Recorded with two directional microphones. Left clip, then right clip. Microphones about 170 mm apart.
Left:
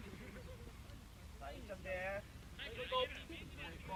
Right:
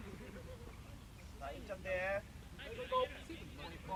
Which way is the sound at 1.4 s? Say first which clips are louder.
Right 4 dB; 40° right (ahead or behind).